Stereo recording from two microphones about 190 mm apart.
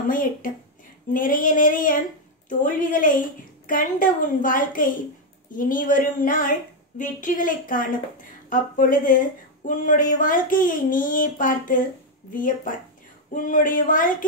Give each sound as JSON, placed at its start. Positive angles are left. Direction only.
{"t": 0.1, "sound": "a woman's voice", "side_deg": 45}